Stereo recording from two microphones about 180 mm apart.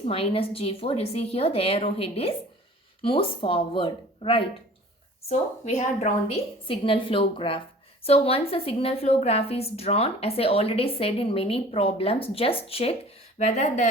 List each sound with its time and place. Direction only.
0.1 s a woman's voice: 30° left (ahead or behind)
5.3 s a woman's voice: 40° left (ahead or behind)